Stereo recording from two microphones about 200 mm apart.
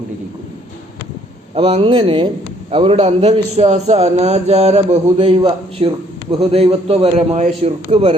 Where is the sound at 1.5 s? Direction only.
30° right (ahead or behind).